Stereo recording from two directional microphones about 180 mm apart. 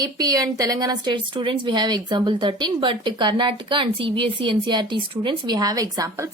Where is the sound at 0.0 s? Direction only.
20° right (ahead or behind).